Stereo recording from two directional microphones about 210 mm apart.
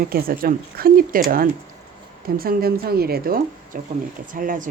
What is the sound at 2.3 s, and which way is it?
Speech, 45° right (ahead or behind).